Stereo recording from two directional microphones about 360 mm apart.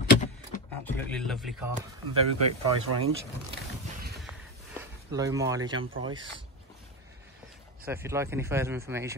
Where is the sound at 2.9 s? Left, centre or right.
Right.